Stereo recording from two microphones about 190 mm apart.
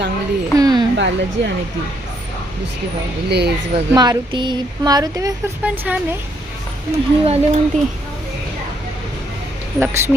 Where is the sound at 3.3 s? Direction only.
60° right (ahead or behind).